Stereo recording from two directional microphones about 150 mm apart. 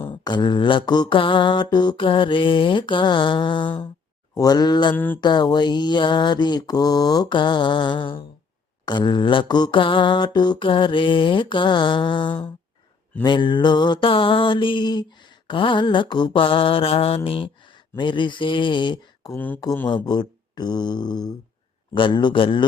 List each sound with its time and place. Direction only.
0.1 s mantra: 30° left (ahead or behind)
4.9 s speech: 10° left (ahead or behind)
5.2 s mantra: 30° left (ahead or behind)